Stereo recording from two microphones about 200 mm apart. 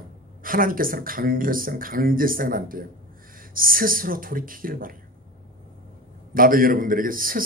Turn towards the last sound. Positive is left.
turn(degrees=-45)  # may be behind; listen again after turning